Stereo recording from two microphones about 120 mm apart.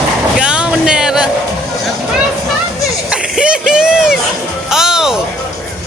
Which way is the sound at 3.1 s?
10° right (ahead or behind).